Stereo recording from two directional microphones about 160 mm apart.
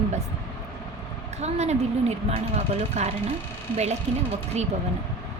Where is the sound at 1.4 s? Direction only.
45° right (ahead or behind).